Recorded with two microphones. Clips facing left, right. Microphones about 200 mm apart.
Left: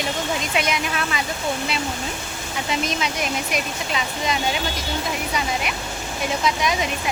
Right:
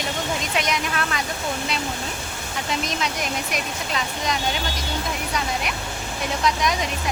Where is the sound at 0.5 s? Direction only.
5° left (ahead or behind).